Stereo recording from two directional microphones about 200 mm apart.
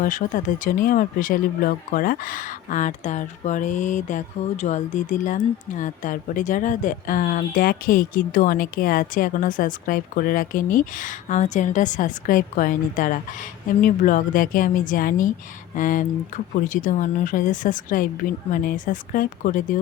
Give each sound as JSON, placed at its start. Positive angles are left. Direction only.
{"t": 0.0, "sound": "a woman's voice", "side_deg": 40}